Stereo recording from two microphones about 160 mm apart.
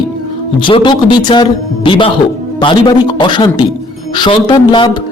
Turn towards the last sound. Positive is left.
turn(degrees=30)  # may be behind; listen again after turning